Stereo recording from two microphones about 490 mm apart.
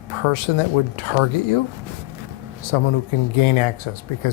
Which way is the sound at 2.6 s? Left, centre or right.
Left.